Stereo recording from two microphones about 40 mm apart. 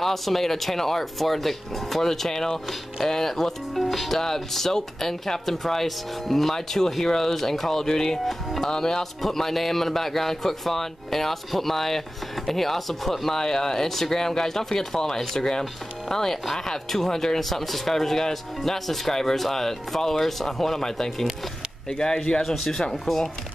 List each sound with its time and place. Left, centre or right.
0.0 s speech: centre
22.4 s speech: centre